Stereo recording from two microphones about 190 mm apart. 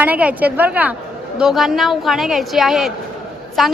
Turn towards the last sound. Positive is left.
turn(degrees=0)  # may be behind; listen again after turning